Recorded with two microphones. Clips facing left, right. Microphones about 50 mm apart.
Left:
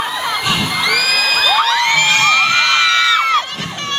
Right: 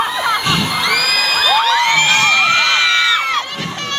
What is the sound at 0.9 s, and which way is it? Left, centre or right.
Crowd, centre.